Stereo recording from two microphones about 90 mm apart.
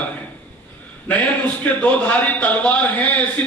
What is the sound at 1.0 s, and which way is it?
A man's voice, 15° left (ahead or behind).